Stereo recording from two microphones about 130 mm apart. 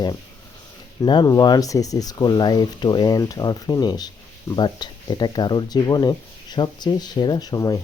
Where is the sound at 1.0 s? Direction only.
35° left (ahead or behind).